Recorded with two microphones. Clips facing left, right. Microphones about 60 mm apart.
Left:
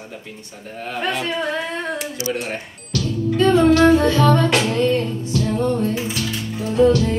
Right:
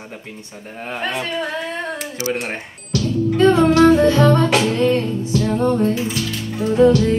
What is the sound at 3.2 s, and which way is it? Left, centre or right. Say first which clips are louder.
Music: even; right.